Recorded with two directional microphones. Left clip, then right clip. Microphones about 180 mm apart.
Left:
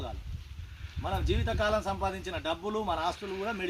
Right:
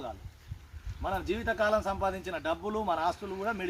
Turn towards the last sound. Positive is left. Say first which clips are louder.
# right 1 dB
turn(degrees=-5)  # may be behind; listen again after turning